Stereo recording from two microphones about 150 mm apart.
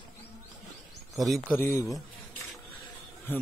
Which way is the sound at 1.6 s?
20° left (ahead or behind).